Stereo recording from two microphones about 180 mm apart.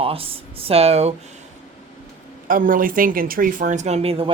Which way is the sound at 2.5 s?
50° right (ahead or behind).